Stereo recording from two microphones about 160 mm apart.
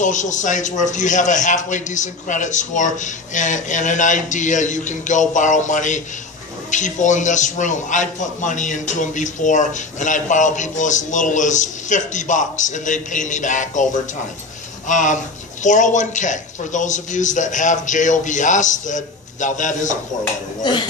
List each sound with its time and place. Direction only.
0.0 s a man's voice: 50° left (ahead or behind)
14.9 s a man's voice: 50° left (ahead or behind)
20.6 s speech: 25° left (ahead or behind)